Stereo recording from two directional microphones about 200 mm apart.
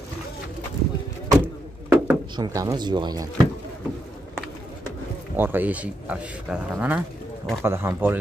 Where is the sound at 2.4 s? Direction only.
15° right (ahead or behind).